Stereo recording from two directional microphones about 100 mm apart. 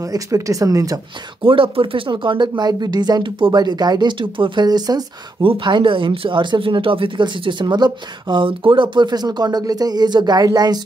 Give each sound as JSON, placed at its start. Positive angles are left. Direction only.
{"t": 0.0, "sound": "speech", "side_deg": -35}
{"t": 1.4, "sound": "speech", "side_deg": -60}
{"t": 3.5, "sound": "speech", "side_deg": -45}
{"t": 4.6, "sound": "speech", "side_deg": -40}
{"t": 5.4, "sound": "speech", "side_deg": -55}